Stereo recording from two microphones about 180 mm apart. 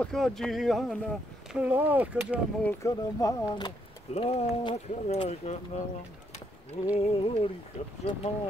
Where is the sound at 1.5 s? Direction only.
10° right (ahead or behind).